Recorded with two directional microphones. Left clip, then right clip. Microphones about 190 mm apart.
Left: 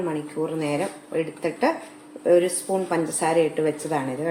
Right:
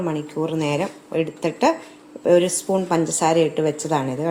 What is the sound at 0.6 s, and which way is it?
Speech, 50° right (ahead or behind).